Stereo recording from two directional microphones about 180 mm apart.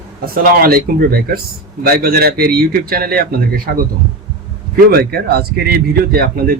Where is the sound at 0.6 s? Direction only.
60° right (ahead or behind).